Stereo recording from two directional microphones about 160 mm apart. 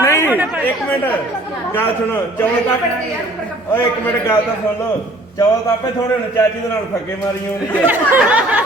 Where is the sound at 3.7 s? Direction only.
15° left (ahead or behind).